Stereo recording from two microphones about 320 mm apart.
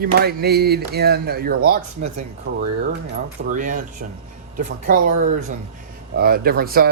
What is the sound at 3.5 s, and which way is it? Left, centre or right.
Speech, right.